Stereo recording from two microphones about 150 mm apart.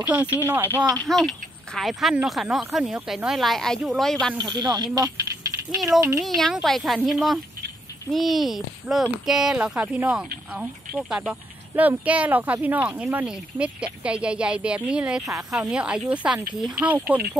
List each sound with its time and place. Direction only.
0.0 s speech: 10° right (ahead or behind)
0.9 s speech: centre (ahead or behind)
4.4 s speech: 30° right (ahead or behind)
6.2 s speech: centre (ahead or behind)